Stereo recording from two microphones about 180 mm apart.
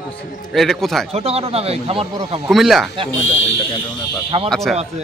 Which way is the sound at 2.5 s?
Centre (ahead or behind).